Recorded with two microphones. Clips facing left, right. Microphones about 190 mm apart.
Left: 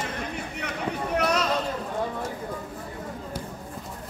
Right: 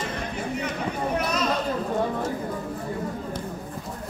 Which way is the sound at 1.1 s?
75° left (ahead or behind).